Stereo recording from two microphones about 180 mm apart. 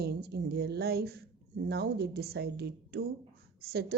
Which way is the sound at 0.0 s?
65° right (ahead or behind).